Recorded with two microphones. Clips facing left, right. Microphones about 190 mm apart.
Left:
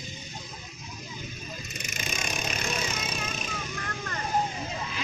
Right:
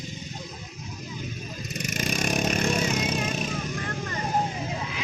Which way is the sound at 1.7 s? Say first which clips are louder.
Right 9 dB; 50° right (ahead or behind).